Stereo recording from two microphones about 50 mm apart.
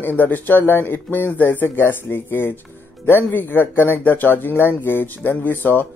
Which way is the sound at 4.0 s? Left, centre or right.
Left.